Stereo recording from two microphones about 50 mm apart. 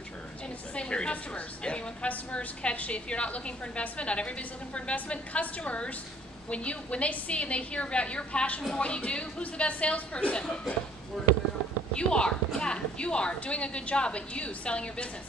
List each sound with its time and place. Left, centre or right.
0.7 s a woman's voice: centre
11.2 s speech: centre
11.9 s a woman's voice: centre